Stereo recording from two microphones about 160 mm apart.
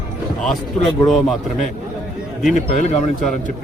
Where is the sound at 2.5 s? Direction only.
45° left (ahead or behind).